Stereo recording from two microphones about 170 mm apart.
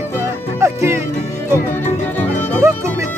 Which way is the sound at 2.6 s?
15° right (ahead or behind).